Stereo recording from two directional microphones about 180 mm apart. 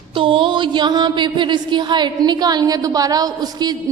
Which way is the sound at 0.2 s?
30° right (ahead or behind).